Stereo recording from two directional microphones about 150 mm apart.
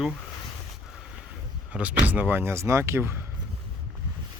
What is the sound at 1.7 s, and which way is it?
Speech, 10° right (ahead or behind).